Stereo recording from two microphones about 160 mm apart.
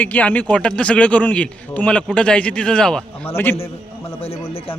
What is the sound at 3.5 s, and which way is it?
Speech, 35° left (ahead or behind).